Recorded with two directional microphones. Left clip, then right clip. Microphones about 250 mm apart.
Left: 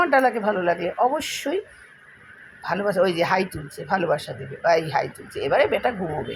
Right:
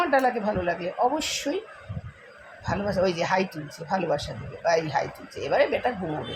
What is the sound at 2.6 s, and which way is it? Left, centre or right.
A woman's voice, left.